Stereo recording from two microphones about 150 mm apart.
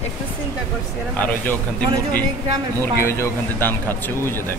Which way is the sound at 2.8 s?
15° left (ahead or behind).